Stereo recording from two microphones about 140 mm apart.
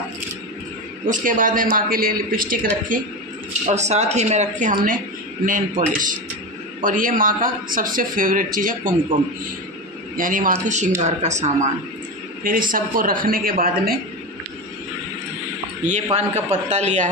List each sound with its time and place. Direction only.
1.0 s a man's voice: 70° right (ahead or behind); by 2.7 s 90° right
2.9 s a man's voice: 70° right (ahead or behind)
3.7 s a man's voice: 55° right (ahead or behind)
5.4 s a man's voice: 75° right (ahead or behind)
10.1 s a man's voice: 75° right (ahead or behind); by 11.7 s 55° right (ahead or behind)
12.4 s a man's voice: 80° right
15.8 s a man's voice: 55° right (ahead or behind)